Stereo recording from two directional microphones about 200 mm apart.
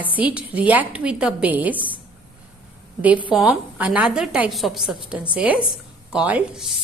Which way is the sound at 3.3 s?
Centre (ahead or behind).